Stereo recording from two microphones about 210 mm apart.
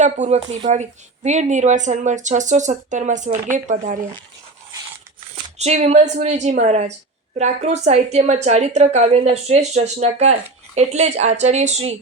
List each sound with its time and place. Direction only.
0.0 s a woman's voice: 35° right (ahead or behind)
5.3 s a woman's voice: 30° right (ahead or behind)